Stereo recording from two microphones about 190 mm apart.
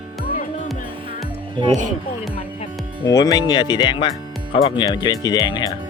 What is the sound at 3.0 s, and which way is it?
Speech, 20° left (ahead or behind).